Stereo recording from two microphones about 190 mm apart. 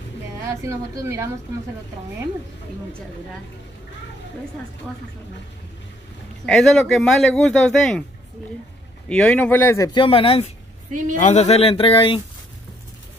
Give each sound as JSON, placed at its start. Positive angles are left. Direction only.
{"t": 0.5, "sound": "a woman's voice", "side_deg": -15}
{"t": 6.4, "sound": "speech", "side_deg": 0}
{"t": 9.1, "sound": "speech", "side_deg": 5}
{"t": 9.9, "sound": "speech", "side_deg": 30}